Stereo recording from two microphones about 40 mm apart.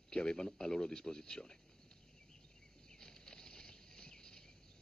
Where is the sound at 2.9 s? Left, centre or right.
Centre.